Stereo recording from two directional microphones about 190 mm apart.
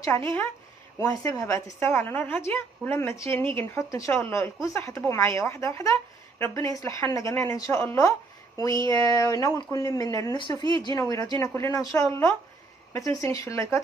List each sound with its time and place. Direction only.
0.0 s speech: 15° left (ahead or behind)